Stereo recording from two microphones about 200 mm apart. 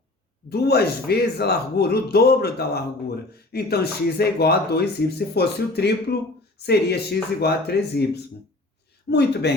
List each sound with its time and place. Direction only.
0.5 s speech: 55° left (ahead or behind)